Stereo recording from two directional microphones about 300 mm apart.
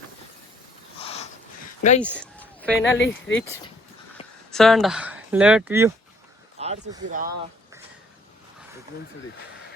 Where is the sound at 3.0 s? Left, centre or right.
Left.